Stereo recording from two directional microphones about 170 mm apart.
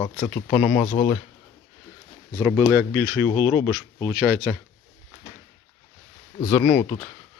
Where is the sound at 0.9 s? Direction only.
30° left (ahead or behind).